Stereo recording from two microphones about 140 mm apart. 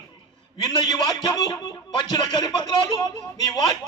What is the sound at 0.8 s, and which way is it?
A man's voice, 30° left (ahead or behind).